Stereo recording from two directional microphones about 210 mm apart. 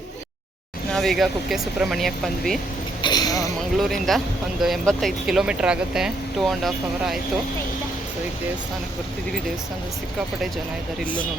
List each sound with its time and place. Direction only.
0.9 s speech: centre (ahead or behind)
3.0 s a sound: 20° left (ahead or behind)
3.8 s speech: centre (ahead or behind)